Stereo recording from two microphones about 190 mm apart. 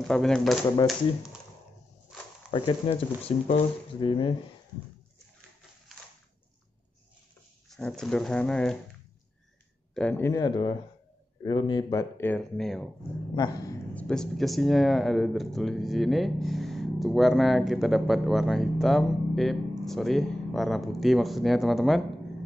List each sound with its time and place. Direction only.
0.0 s speech: 5° left (ahead or behind)
2.5 s speech: 25° left (ahead or behind)
7.7 s speech: 5° left (ahead or behind)
9.9 s speech: 10° left (ahead or behind)
13.9 s speech: 5° left (ahead or behind)